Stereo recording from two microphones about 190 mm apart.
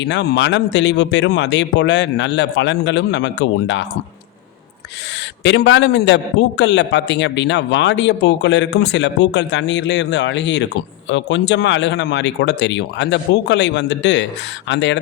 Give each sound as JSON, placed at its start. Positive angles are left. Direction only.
{"t": 0.0, "sound": "a man's voice", "side_deg": 65}
{"t": 5.4, "sound": "a man's voice", "side_deg": 70}